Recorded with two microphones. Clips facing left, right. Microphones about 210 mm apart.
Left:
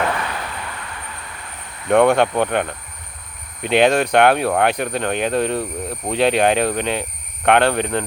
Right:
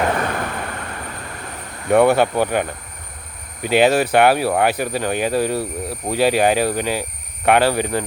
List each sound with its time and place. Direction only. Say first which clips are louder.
0.2 s vehicle: right 5 dB; 50° right (ahead or behind)
1.9 s speech: even; 5° right (ahead or behind)